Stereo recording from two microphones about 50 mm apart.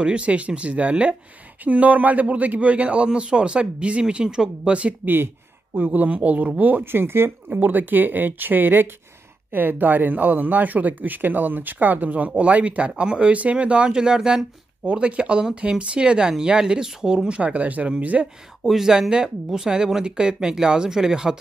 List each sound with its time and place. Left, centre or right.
0.0 s a man's voice: right
5.0 s speech: right
6.8 s a man's voice: right; by 14.4 s centre
14.9 s a man's voice: right
17.4 s a man's voice: right
18.6 s speech: centre